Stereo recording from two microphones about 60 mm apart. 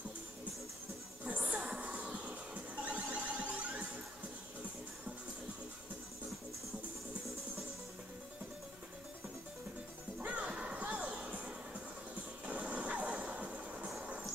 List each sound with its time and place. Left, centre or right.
1.2 s music: right
10.1 s music: right
12.4 s vehicle: right